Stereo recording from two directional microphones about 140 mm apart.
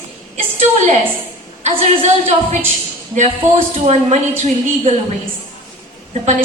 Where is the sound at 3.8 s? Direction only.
50° right (ahead or behind).